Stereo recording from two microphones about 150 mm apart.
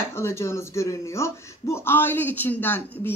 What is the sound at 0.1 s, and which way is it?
Speech, 15° left (ahead or behind).